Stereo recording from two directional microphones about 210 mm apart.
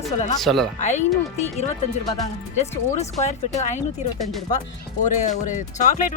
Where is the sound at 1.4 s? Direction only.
30° left (ahead or behind).